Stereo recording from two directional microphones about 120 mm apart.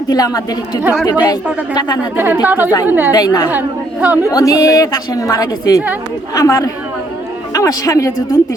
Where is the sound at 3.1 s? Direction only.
35° left (ahead or behind).